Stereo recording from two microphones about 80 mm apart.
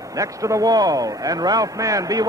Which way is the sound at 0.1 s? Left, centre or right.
Right.